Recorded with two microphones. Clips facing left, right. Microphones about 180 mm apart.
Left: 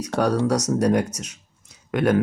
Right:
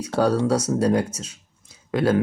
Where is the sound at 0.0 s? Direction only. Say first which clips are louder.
Right 1 dB; 30° right (ahead or behind).